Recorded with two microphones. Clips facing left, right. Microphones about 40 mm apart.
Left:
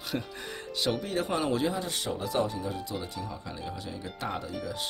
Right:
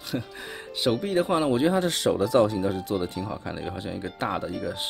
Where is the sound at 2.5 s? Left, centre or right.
Right.